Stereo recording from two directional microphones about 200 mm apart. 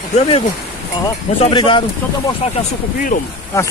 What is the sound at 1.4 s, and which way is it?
Speech, 25° left (ahead or behind).